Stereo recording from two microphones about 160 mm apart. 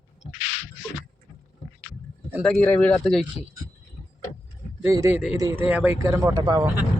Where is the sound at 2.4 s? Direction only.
5° left (ahead or behind).